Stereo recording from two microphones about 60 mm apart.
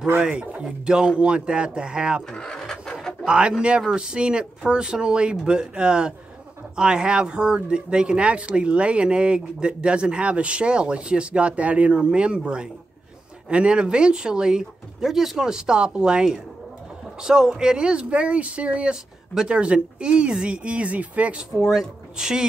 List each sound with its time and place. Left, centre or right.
0.2 s speech: centre
2.3 s a sound: centre
3.3 s speech: centre
21.7 s speech: centre